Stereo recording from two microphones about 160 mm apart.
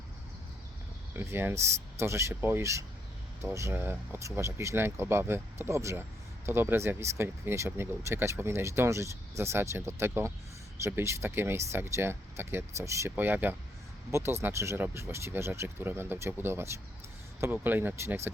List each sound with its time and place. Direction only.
1.1 s speech: 15° right (ahead or behind)